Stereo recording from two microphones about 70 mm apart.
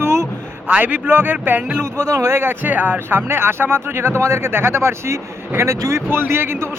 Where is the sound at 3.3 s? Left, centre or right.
Right.